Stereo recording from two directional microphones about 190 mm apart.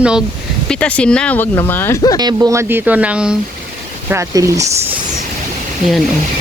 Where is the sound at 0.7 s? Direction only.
5° left (ahead or behind).